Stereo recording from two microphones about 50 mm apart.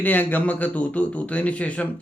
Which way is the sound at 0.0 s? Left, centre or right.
Left.